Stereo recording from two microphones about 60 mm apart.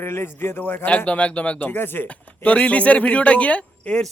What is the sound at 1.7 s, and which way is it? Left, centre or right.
Speech, left.